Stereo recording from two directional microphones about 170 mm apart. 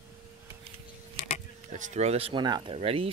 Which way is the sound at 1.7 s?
45° right (ahead or behind).